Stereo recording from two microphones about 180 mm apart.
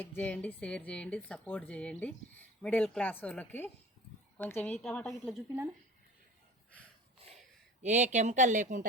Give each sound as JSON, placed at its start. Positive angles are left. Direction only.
{"t": 0.0, "sound": "a woman's voice", "side_deg": 10}
{"t": 7.2, "sound": "a sound", "side_deg": -35}
{"t": 7.8, "sound": "speech", "side_deg": -40}